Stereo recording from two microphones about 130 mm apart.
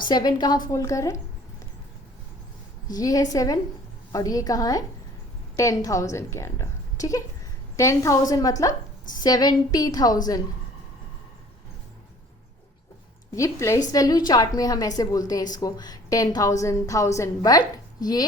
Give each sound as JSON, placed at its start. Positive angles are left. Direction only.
{"t": 0.0, "sound": "a woman's voice", "side_deg": 30}
{"t": 2.8, "sound": "a woman's voice", "side_deg": 30}
{"t": 13.3, "sound": "a woman's voice", "side_deg": 25}